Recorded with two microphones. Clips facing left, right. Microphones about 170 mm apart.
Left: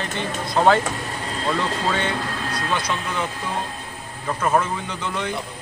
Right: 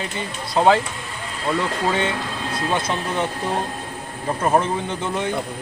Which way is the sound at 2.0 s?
25° right (ahead or behind).